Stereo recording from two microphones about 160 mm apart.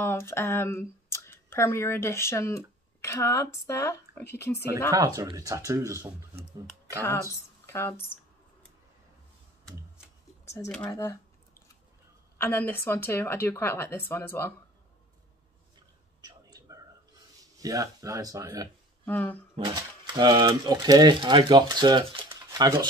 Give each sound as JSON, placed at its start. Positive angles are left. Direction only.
{"t": 0.0, "sound": "speech", "side_deg": 15}
{"t": 4.9, "sound": "speech", "side_deg": -20}
{"t": 7.0, "sound": "speech", "side_deg": 20}
{"t": 10.9, "sound": "speech", "side_deg": 20}
{"t": 12.4, "sound": "speech", "side_deg": 15}
{"t": 16.2, "sound": "a sound", "side_deg": -25}
{"t": 17.6, "sound": "speech", "side_deg": -20}
{"t": 19.0, "sound": "speech", "side_deg": 10}
{"t": 19.7, "sound": "speech", "side_deg": -25}
{"t": 22.3, "sound": "a sound", "side_deg": -20}